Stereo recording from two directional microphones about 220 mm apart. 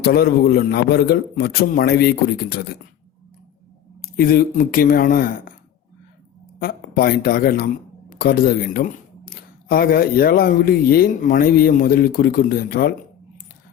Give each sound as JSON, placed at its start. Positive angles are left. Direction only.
{"t": 0.0, "sound": "a man's voice", "side_deg": 45}
{"t": 4.2, "sound": "speech", "side_deg": 40}
{"t": 6.6, "sound": "a man's voice", "side_deg": 45}